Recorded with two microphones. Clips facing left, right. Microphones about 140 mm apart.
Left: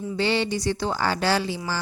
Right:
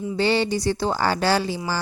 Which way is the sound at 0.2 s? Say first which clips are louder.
Right 3 dB; 40° right (ahead or behind).